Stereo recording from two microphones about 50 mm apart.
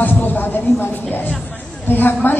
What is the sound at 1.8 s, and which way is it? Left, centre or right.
Speech, left.